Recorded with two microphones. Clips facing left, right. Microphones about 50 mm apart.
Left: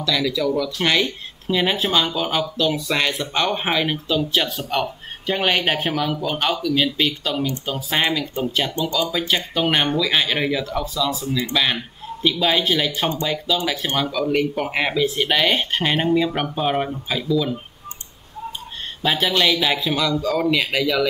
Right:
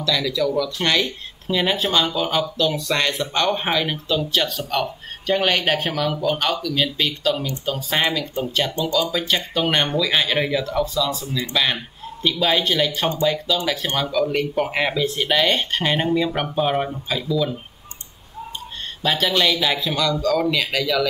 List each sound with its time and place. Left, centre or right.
0.0 s speech: centre
19.0 s speech: centre